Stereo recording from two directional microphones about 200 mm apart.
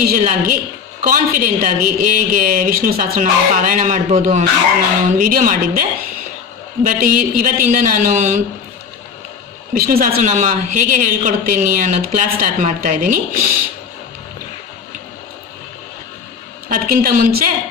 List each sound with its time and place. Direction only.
0.0 s a woman's voice: 45° right (ahead or behind)
6.8 s a woman's voice: 45° right (ahead or behind)
9.7 s a woman's voice: 45° right (ahead or behind)
16.6 s a woman's voice: 45° right (ahead or behind)